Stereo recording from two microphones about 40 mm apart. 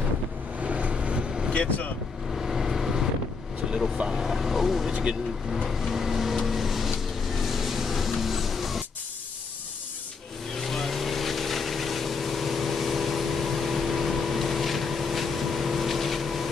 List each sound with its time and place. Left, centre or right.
0.6 s vehicle: right
1.5 s speech: left
2.3 s vehicle: centre
4.1 s speech: centre
6.3 s vehicle: centre
10.5 s vehicle: centre